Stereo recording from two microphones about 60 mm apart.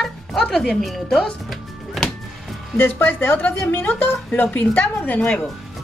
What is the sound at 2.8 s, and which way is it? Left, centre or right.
Speech, left.